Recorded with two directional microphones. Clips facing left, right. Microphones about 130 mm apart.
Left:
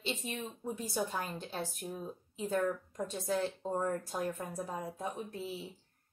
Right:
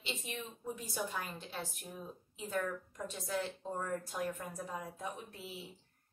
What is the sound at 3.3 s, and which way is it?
A woman's voice, 35° left (ahead or behind).